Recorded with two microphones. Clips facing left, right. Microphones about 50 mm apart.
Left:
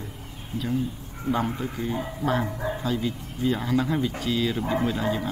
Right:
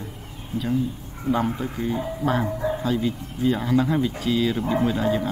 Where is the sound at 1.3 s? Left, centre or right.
Centre.